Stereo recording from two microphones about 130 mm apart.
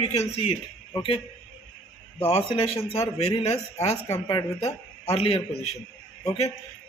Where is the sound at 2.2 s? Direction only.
50° left (ahead or behind).